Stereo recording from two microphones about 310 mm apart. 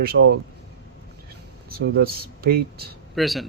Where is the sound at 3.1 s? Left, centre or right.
Centre.